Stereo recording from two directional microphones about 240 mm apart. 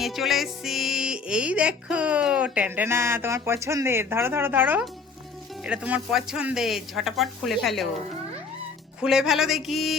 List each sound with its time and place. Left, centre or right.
0.0 s speech: centre
9.0 s speech: centre